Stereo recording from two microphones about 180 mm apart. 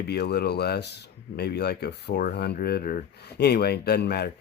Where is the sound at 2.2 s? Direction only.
55° left (ahead or behind).